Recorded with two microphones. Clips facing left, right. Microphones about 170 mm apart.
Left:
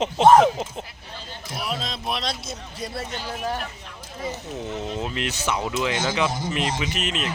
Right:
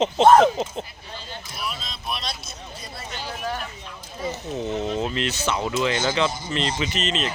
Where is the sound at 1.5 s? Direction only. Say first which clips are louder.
Left 5 dB; 90° left.